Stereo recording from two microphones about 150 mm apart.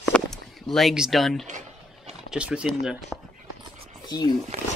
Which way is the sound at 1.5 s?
55° right (ahead or behind).